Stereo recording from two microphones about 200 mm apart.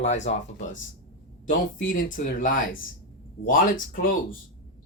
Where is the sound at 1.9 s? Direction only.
40° left (ahead or behind).